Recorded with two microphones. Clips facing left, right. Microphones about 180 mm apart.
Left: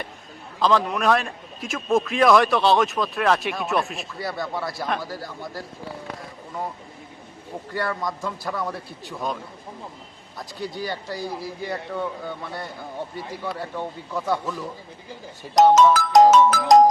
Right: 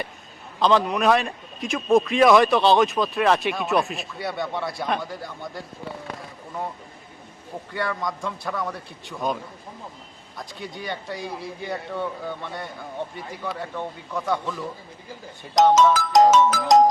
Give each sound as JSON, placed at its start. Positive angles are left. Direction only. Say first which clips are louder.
{"t": 0.6, "sound": "a man's voice", "louder": "right 1 dB", "side_deg": 0}
{"t": 7.8, "sound": "a man's voice", "louder": "even", "side_deg": 0}
{"t": 15.7, "sound": "speech", "louder": "left 2 dB", "side_deg": 60}